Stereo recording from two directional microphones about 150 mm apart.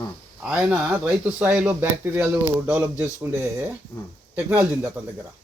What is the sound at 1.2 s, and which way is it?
Speech, 10° right (ahead or behind).